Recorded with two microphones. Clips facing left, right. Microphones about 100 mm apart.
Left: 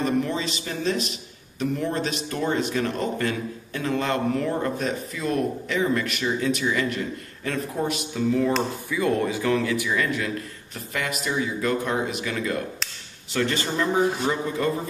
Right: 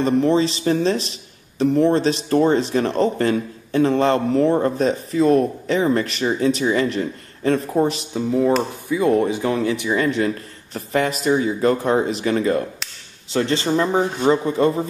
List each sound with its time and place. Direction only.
0.0 s a man's voice: 30° right (ahead or behind)